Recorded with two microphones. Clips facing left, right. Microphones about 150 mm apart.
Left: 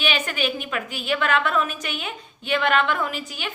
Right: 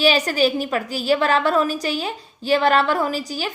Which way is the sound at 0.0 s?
35° right (ahead or behind).